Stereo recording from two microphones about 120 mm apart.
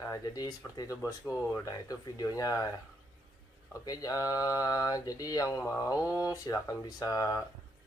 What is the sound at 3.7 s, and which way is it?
Mantra, 30° left (ahead or behind).